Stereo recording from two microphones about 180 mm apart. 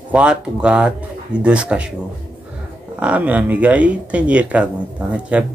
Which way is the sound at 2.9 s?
5° right (ahead or behind).